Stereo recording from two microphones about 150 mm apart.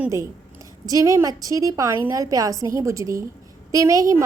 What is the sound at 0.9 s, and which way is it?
A woman's voice, 20° right (ahead or behind).